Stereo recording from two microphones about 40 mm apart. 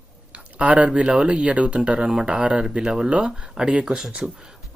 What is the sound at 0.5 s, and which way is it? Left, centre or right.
Speech, right.